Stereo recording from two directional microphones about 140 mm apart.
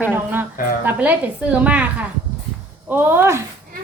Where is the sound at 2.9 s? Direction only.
15° right (ahead or behind).